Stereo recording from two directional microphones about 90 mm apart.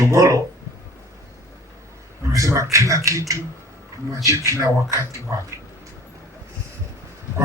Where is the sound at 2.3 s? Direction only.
35° right (ahead or behind).